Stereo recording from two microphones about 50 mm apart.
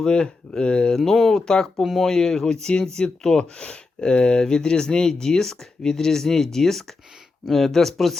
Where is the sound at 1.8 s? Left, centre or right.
Centre.